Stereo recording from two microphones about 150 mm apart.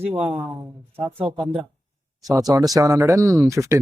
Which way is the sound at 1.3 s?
30° right (ahead or behind).